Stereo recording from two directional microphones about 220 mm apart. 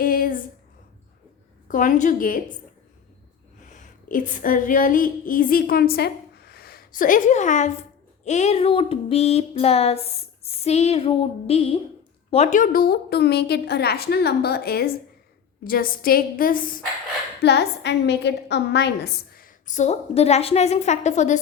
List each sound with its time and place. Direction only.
0.0 s a sound: 40° left (ahead or behind)
1.6 s a woman's voice: 35° left (ahead or behind)
3.6 s female singing: 35° left (ahead or behind)
8.2 s child singing: 30° left (ahead or behind)
12.3 s a woman's voice: 30° left (ahead or behind)